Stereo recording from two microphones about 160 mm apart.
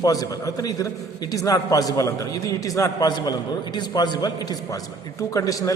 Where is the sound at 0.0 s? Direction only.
20° left (ahead or behind).